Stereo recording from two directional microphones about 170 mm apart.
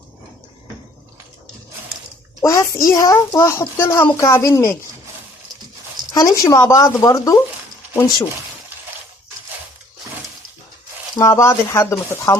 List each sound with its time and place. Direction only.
2.4 s speech: 20° left (ahead or behind)
6.1 s speech: 20° left (ahead or behind)
11.2 s speech: 20° left (ahead or behind)